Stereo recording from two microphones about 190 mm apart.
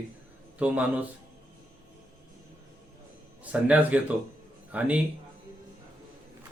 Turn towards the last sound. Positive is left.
turn(degrees=-10)  # may be behind; listen again after turning